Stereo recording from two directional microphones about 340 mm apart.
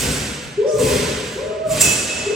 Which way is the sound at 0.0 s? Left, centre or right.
Centre.